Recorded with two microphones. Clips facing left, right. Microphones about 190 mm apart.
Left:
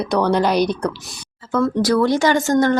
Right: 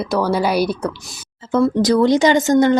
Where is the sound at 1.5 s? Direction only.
20° right (ahead or behind).